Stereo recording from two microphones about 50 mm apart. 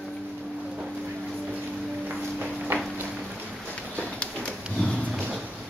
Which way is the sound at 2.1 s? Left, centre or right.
Right.